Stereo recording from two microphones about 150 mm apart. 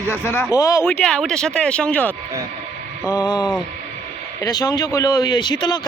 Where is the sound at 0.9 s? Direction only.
5° left (ahead or behind).